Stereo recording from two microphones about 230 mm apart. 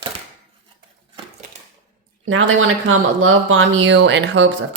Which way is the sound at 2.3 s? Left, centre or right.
Right.